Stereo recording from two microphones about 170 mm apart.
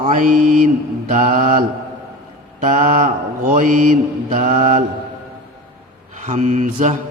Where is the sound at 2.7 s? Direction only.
50° right (ahead or behind).